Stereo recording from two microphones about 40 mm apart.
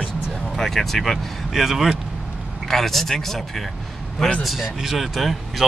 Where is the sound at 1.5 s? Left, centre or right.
Centre.